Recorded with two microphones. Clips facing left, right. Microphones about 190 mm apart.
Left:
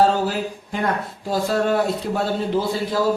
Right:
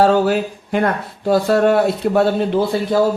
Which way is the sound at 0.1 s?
70° right (ahead or behind).